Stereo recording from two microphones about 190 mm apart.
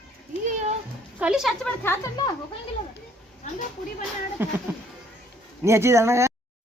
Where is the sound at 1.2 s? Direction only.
5° right (ahead or behind).